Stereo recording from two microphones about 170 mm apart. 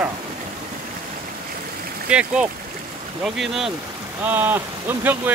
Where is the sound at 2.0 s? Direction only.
5° right (ahead or behind).